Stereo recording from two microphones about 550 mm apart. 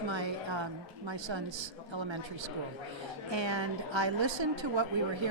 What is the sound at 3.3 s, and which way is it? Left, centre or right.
A woman's voice, right.